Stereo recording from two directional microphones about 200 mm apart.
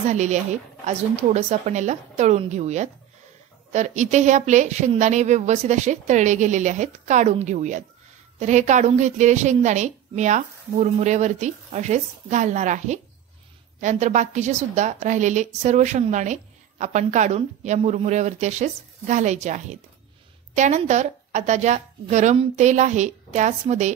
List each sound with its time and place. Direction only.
0.1 s speech: 35° right (ahead or behind)